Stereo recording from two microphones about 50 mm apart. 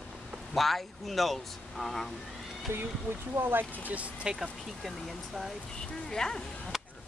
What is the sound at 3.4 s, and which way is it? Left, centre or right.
Speech, right.